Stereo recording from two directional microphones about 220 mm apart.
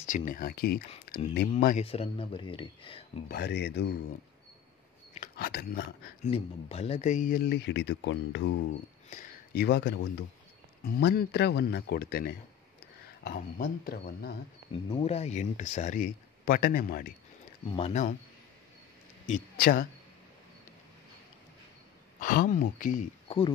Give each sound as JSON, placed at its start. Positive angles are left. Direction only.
{"t": 0.0, "sound": "speech", "side_deg": 35}
{"t": 1.1, "sound": "a sound", "side_deg": 45}
{"t": 1.6, "sound": "speech", "side_deg": 40}
{"t": 1.9, "sound": "speech", "side_deg": 25}
{"t": 3.3, "sound": "speech", "side_deg": 50}
{"t": 5.1, "sound": "speech", "side_deg": 40}
{"t": 6.2, "sound": "speech", "side_deg": 30}
{"t": 9.1, "sound": "speech", "side_deg": 40}
{"t": 14.9, "sound": "speech", "side_deg": 25}
{"t": 17.6, "sound": "speech", "side_deg": 25}
{"t": 19.2, "sound": "speech", "side_deg": 40}
{"t": 22.2, "sound": "speech", "side_deg": 40}